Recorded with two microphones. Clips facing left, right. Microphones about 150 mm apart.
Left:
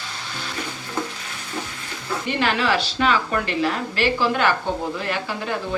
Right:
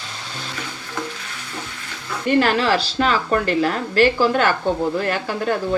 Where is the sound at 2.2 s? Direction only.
40° right (ahead or behind).